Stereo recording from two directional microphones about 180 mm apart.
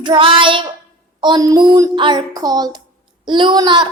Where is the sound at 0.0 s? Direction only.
25° right (ahead or behind).